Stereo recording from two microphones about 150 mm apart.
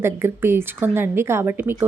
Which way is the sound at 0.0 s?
15° right (ahead or behind).